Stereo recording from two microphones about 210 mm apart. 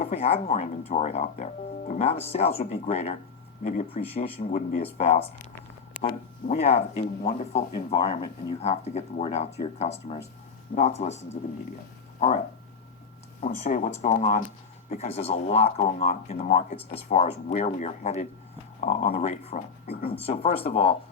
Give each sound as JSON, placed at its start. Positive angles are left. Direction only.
{"t": 0.0, "sound": "speech", "side_deg": 30}
{"t": 6.5, "sound": "speech", "side_deg": 30}
{"t": 13.4, "sound": "speech", "side_deg": 35}